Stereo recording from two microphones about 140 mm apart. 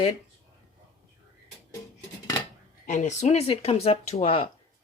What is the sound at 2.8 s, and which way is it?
Speech, 55° left (ahead or behind).